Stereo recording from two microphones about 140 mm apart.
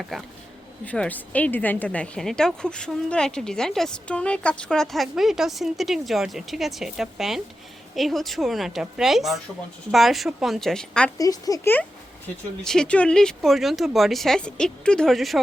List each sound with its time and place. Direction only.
0.1 s a woman's voice: centre (ahead or behind)
11.2 s speech: 25° left (ahead or behind)
12.6 s a woman's voice: 5° left (ahead or behind)